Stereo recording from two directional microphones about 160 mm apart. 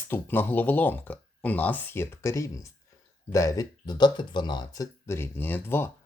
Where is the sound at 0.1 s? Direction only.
10° left (ahead or behind).